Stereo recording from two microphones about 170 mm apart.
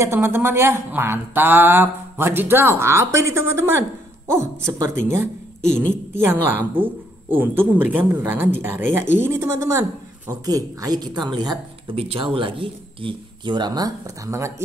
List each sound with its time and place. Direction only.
0.0 s speech: 15° right (ahead or behind)
5.7 s a woman's voice: 5° left (ahead or behind)
6.5 s speech: 10° right (ahead or behind)